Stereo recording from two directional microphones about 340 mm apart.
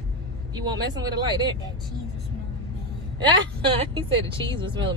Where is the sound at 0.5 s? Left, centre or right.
Centre.